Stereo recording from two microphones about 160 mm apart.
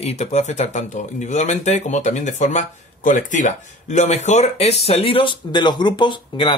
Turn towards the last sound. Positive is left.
turn(degrees=30)  # may be behind; listen again after turning